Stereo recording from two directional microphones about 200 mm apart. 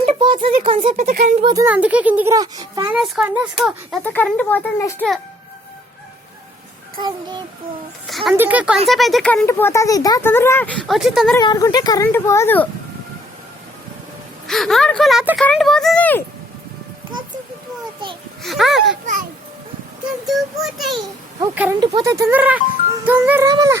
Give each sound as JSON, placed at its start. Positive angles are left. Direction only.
{"t": 0.0, "sound": "speech", "side_deg": -25}
{"t": 1.2, "sound": "child singing", "side_deg": -30}
{"t": 1.5, "sound": "a child's voice", "side_deg": -10}
{"t": 2.9, "sound": "speech", "side_deg": -5}
{"t": 7.0, "sound": "child singing", "side_deg": -20}
{"t": 8.0, "sound": "a child's voice", "side_deg": 0}
{"t": 11.3, "sound": "speech", "side_deg": 15}
{"t": 14.4, "sound": "speech", "side_deg": 0}
{"t": 18.4, "sound": "speech", "side_deg": 0}
{"t": 20.2, "sound": "a child's voice", "side_deg": 0}